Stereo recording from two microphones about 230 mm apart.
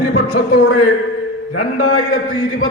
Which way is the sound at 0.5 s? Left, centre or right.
Left.